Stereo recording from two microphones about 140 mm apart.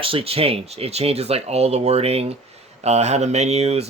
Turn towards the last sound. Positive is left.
turn(degrees=-50)  # may be behind; listen again after turning